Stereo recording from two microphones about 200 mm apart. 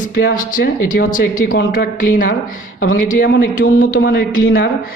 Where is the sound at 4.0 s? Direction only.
60° left (ahead or behind).